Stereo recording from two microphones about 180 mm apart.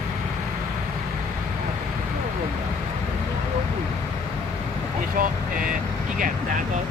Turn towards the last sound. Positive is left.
turn(degrees=-50)  # may be behind; listen again after turning